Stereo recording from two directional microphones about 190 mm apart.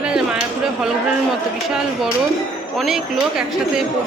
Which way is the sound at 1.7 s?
5° right (ahead or behind).